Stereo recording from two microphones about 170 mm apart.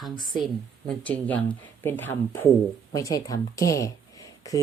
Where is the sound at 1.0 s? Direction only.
10° left (ahead or behind).